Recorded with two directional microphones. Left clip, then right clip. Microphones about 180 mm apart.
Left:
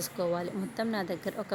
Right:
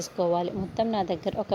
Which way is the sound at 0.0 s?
20° right (ahead or behind).